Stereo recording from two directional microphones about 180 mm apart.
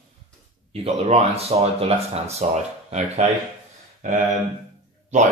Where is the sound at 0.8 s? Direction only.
35° right (ahead or behind).